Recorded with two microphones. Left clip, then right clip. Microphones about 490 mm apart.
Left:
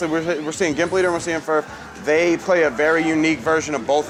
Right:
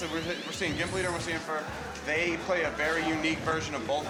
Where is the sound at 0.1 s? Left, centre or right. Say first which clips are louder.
Left 12 dB; left.